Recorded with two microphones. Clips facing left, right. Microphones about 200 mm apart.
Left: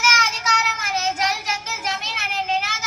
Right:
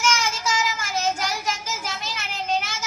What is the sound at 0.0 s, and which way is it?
Child singing, 65° left (ahead or behind).